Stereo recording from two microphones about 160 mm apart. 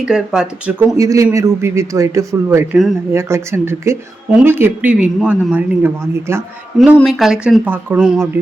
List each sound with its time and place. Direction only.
0.0 s speech: 5° right (ahead or behind)
0.9 s a man's voice: 20° right (ahead or behind)
6.7 s speech: centre (ahead or behind)